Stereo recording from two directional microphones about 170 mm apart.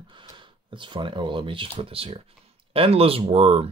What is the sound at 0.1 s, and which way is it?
Speech, 30° right (ahead or behind).